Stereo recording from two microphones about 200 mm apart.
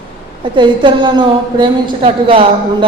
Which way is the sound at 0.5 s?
25° right (ahead or behind).